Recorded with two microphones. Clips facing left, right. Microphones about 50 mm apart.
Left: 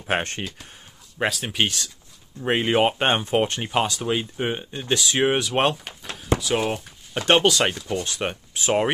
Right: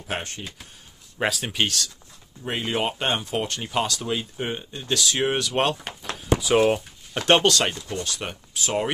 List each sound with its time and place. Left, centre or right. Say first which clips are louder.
0.0 s speech: left 6 dB; left
1.1 s speech: left 1 dB; centre
1.6 s speech: left 2 dB; left
6.4 s speech: right 8 dB; centre
7.2 s speech: even; centre
7.5 s speech: left 2 dB; centre